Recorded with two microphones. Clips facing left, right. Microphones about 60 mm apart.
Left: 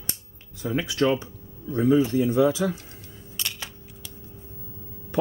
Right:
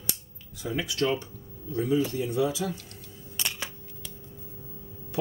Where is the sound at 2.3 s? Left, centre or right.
Left.